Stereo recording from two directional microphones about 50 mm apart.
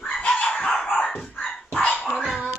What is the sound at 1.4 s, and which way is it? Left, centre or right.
Music, centre.